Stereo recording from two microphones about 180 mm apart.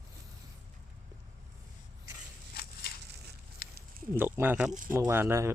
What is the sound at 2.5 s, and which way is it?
Crushing, 60° left (ahead or behind).